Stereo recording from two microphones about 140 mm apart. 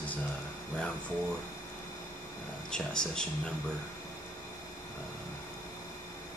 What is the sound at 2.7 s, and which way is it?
Speech, 5° left (ahead or behind).